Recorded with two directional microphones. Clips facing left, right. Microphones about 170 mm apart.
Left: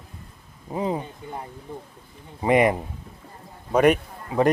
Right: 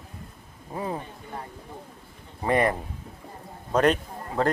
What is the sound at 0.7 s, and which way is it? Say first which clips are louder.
A man's voice: left 5 dB; 20° left (ahead or behind).